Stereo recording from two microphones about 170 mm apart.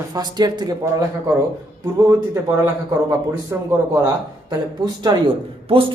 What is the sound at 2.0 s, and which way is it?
A man's voice, 15° right (ahead or behind).